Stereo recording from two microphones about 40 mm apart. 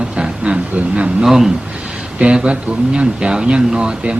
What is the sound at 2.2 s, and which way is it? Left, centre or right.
Speech, right.